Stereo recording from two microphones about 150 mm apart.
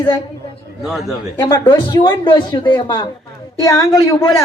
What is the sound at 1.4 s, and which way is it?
Speech, 15° left (ahead or behind).